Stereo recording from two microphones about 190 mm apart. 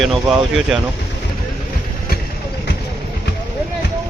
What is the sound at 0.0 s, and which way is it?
Speech, centre (ahead or behind).